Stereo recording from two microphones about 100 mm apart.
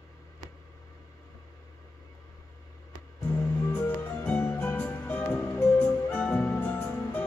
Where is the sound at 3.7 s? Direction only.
20° left (ahead or behind).